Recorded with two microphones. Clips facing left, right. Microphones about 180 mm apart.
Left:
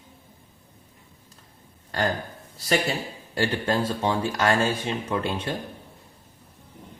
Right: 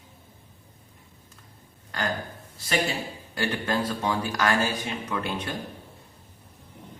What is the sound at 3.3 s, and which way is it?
Speech, 30° left (ahead or behind).